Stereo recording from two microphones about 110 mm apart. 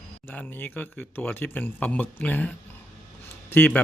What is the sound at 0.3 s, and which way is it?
Speech, 20° left (ahead or behind).